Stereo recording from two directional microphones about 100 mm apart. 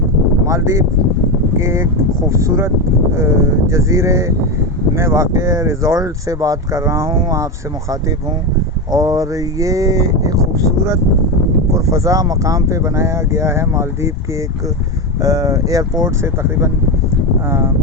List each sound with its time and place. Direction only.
0.4 s speech: 30° right (ahead or behind)
8.9 s speech: 40° right (ahead or behind)
15.2 s speech: 35° right (ahead or behind)